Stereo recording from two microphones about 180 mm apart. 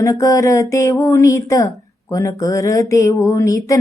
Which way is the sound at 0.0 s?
20° left (ahead or behind).